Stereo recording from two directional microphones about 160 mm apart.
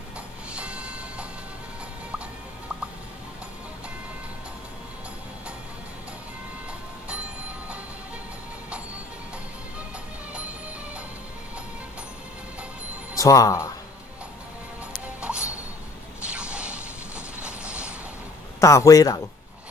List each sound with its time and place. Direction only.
0.5 s a sound: 5° right (ahead or behind)
13.1 s speech: 20° left (ahead or behind)
15.2 s music: 10° right (ahead or behind)
16.3 s a sound: 5° right (ahead or behind)
17.4 s mechanisms: 5° right (ahead or behind)
18.6 s a man's voice: 20° left (ahead or behind)